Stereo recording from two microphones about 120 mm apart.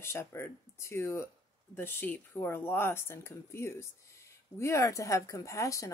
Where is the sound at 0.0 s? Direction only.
20° left (ahead or behind).